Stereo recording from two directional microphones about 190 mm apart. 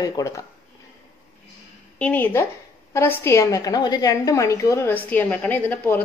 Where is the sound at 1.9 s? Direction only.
10° left (ahead or behind).